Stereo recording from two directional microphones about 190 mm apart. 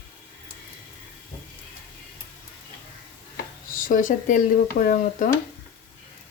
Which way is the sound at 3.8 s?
45° left (ahead or behind).